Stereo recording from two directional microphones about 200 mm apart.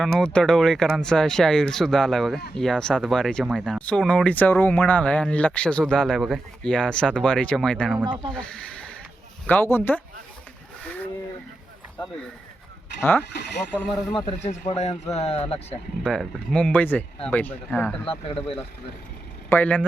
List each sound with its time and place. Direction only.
0.0 s speech: 5° left (ahead or behind)
13.0 s speech: 10° left (ahead or behind)
14.7 s speech: 30° left (ahead or behind)
16.0 s speech: 5° left (ahead or behind)
18.0 s speech: 30° left (ahead or behind)
19.5 s speech: 10° left (ahead or behind)